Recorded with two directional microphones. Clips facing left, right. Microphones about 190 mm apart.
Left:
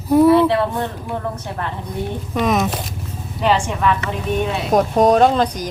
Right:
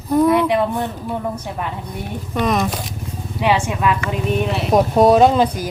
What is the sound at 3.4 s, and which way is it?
A woman's voice, 10° right (ahead or behind).